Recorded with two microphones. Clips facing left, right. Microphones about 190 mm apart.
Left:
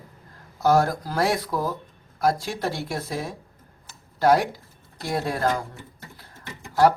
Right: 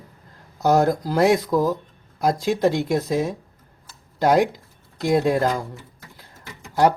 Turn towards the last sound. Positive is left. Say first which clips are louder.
# even
turn(degrees=-20)  # may be behind; listen again after turning